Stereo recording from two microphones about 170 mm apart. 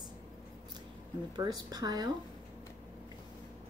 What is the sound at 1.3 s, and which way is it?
Speech, 25° right (ahead or behind).